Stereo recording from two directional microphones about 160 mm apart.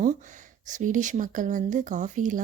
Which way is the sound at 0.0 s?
50° right (ahead or behind).